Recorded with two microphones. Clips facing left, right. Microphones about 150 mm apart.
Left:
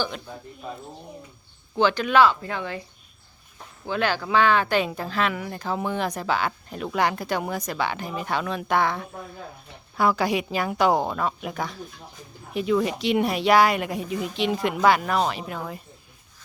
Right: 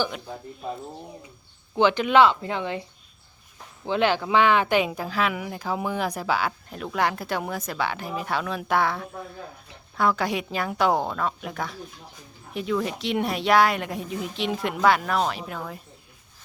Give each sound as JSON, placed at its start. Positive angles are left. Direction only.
{"t": 1.7, "sound": "speech", "side_deg": -20}
{"t": 3.8, "sound": "speech", "side_deg": -20}